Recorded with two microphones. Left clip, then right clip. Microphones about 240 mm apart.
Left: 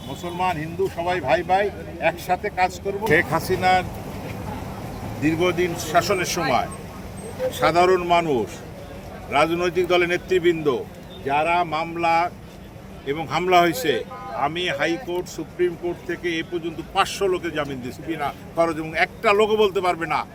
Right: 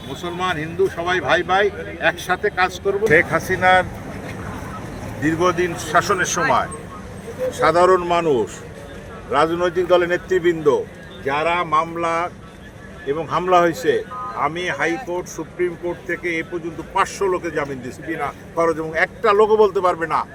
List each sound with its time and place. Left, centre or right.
0.3 s speech: centre
5.2 s speech: centre
7.6 s speech: left